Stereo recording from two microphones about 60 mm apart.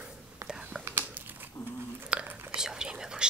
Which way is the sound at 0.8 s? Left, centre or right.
Right.